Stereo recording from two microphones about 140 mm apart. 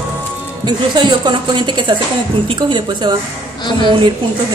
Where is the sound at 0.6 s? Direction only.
35° right (ahead or behind).